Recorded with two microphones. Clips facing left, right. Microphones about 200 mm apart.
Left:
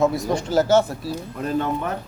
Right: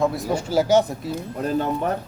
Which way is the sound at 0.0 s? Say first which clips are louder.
Left 2 dB; centre (ahead or behind).